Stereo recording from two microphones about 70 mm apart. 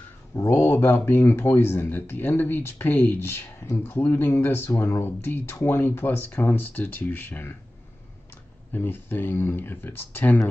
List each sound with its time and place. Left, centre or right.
0.6 s speech: left
8.7 s speech: left